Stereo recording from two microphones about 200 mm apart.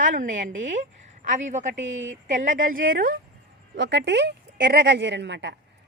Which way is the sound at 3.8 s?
60° right (ahead or behind).